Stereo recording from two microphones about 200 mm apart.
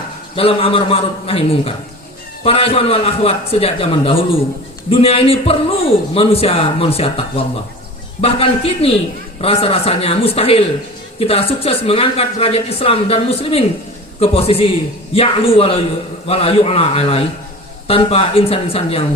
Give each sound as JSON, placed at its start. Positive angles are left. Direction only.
{"t": 0.3, "sound": "speech", "side_deg": 30}